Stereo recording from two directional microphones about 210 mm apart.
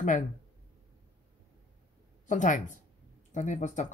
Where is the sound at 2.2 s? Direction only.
35° left (ahead or behind).